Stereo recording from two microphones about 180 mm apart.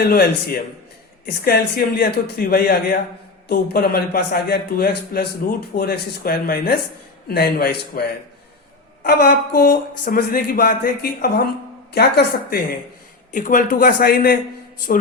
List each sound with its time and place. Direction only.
0.0 s a man's voice: 60° left (ahead or behind)
9.0 s a man's voice: 60° left (ahead or behind)
13.3 s speech: 45° left (ahead or behind)